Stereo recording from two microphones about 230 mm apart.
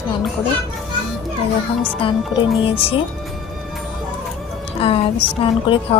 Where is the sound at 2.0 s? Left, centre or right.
Left.